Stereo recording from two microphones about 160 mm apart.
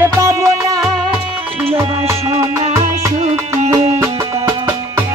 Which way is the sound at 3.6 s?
45° right (ahead or behind).